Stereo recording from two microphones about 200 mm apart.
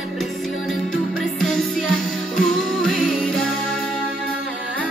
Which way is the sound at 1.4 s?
5° left (ahead or behind).